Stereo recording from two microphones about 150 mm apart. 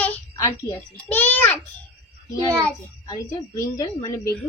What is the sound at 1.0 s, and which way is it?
Speech, 10° left (ahead or behind).